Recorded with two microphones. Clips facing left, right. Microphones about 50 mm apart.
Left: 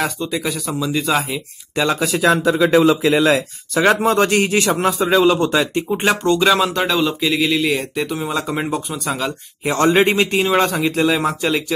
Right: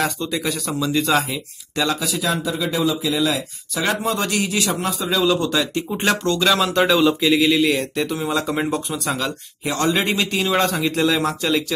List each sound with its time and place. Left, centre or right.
0.0 s speech: centre
2.0 s speech: left
5.9 s speech: centre
6.7 s speech: centre
9.7 s speech: left
10.9 s speech: centre